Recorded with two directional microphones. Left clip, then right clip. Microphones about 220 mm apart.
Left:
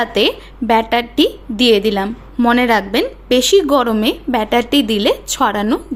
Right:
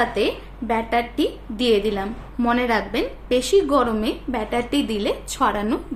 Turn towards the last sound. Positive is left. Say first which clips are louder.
# left 6 dB
turn(degrees=35)  # may be behind; listen again after turning